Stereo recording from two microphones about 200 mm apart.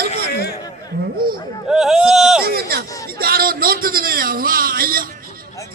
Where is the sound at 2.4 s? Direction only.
50° right (ahead or behind).